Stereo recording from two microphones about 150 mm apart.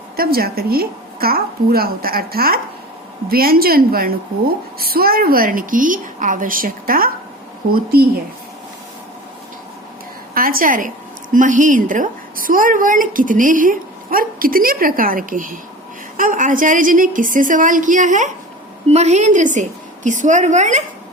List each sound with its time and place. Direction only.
0.2 s a child's voice: 90° right; by 7.1 s 75° right (ahead or behind)
7.7 s speech: 85° right
10.3 s a woman's voice: 75° right (ahead or behind); by 20.8 s 50° right (ahead or behind)